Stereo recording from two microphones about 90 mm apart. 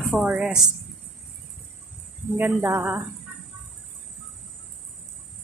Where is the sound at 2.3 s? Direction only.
25° right (ahead or behind).